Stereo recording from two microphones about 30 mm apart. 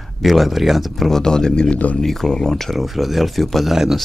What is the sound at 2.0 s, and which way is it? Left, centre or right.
Speech, centre.